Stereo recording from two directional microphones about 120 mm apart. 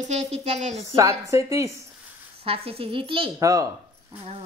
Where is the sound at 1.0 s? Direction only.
25° right (ahead or behind).